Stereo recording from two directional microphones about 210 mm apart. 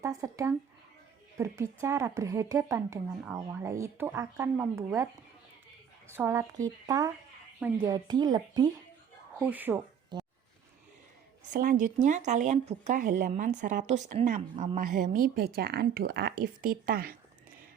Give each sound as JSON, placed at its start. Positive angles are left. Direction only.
{"t": 0.0, "sound": "a woman's voice", "side_deg": -15}
{"t": 6.1, "sound": "a woman's voice", "side_deg": -10}
{"t": 9.4, "sound": "a woman's voice", "side_deg": -10}
{"t": 10.1, "sound": "a sound", "side_deg": -20}
{"t": 11.5, "sound": "speech", "side_deg": -40}